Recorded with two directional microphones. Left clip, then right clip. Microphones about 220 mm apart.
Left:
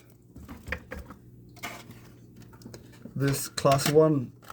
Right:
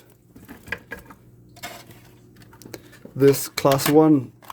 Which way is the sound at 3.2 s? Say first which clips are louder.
Right 10 dB; 30° right (ahead or behind).